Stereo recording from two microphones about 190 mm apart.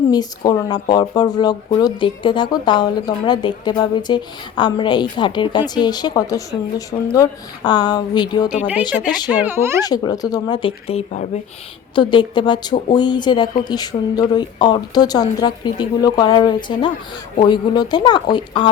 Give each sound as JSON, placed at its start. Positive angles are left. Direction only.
{"t": 0.1, "sound": "speech", "side_deg": 20}
{"t": 8.4, "sound": "speech", "side_deg": -5}
{"t": 9.8, "sound": "speech", "side_deg": 20}
{"t": 11.9, "sound": "speech", "side_deg": 25}